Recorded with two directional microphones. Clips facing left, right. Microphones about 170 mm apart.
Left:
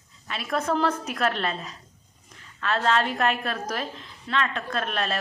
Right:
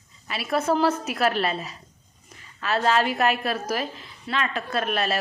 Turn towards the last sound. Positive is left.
turn(degrees=-5)  # may be behind; listen again after turning